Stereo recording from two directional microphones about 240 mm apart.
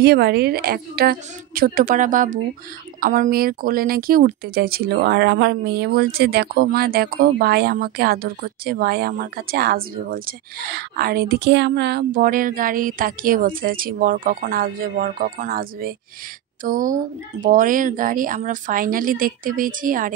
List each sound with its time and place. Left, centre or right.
0.0 s speech: right